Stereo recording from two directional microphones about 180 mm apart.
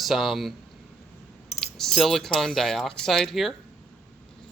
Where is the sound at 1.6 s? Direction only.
Centre (ahead or behind).